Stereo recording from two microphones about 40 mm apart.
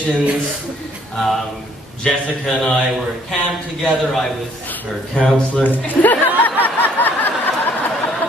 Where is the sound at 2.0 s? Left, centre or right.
Centre.